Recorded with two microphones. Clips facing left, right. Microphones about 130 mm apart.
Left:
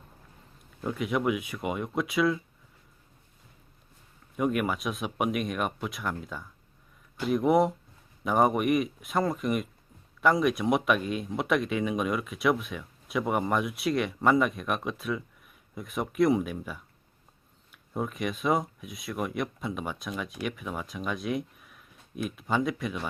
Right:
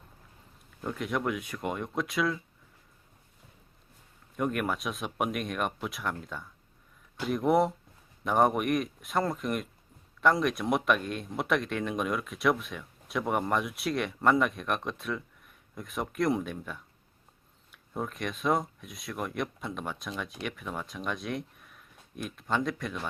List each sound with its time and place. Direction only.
0.8 s speech: 5° left (ahead or behind)
4.4 s speech: 5° left (ahead or behind)